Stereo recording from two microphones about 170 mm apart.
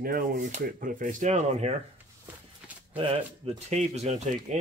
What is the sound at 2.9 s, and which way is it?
Speech, 35° right (ahead or behind).